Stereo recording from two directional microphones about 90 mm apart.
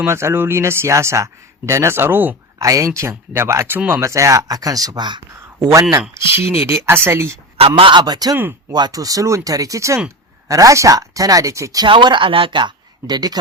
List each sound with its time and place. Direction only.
0.0 s a man's voice: 30° right (ahead or behind)
2.6 s speech: 35° right (ahead or behind)
5.5 s a man's voice: 30° right (ahead or behind)
7.8 s speech: 70° right (ahead or behind)
8.0 s speech: 45° right (ahead or behind)
11.9 s speech: 65° right (ahead or behind); by 13.4 s 50° right (ahead or behind)